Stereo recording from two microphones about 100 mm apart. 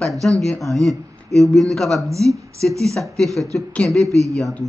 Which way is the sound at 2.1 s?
30° right (ahead or behind).